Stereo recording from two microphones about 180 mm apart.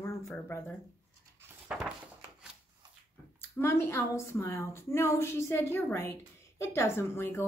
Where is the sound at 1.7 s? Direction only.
5° right (ahead or behind).